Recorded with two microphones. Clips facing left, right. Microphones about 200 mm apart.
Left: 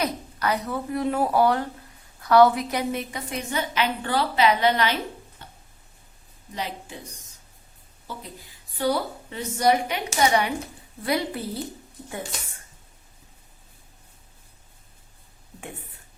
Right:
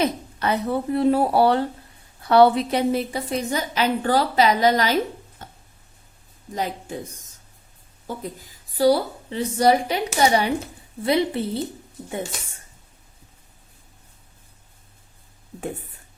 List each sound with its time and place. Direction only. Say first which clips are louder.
0.0 s a woman's voice: right 4 dB; 25° right (ahead or behind)
5.4 s a sound: right 4 dB; 45° right (ahead or behind)
6.5 s a woman's voice: right 5 dB; 45° right (ahead or behind)
8.0 s a woman's voice: right 7 dB; 45° right (ahead or behind); by 11.6 s 25° right (ahead or behind)